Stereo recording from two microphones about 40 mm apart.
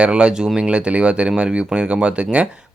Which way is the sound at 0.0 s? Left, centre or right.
Right.